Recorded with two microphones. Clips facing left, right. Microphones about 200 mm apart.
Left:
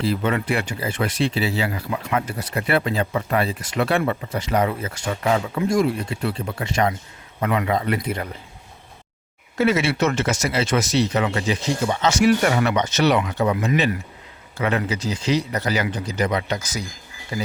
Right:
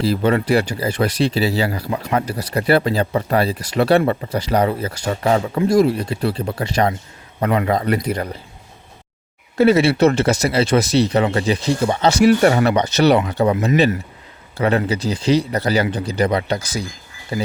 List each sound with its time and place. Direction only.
0.0 s speech: 35° right (ahead or behind)
9.6 s speech: 35° right (ahead or behind)